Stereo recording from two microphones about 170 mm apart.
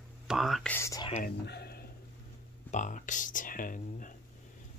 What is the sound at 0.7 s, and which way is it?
Speech, 15° left (ahead or behind).